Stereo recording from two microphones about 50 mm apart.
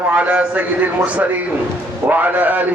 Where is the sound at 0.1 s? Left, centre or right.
Right.